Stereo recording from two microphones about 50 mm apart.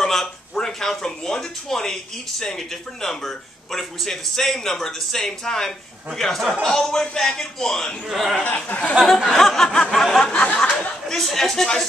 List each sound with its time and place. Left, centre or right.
0.0 s speech: centre
8.1 s speech: centre
8.5 s speech: left
9.0 s speech: centre
11.1 s speech: centre